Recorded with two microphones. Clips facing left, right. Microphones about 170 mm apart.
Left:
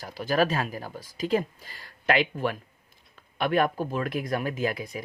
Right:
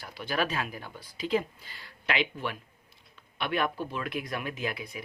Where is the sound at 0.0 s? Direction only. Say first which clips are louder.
Left 6 dB; 40° left (ahead or behind).